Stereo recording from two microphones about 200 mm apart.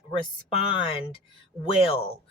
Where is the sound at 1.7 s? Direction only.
30° left (ahead or behind).